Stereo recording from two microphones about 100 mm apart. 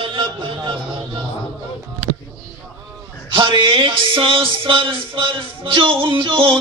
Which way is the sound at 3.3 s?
55° right (ahead or behind).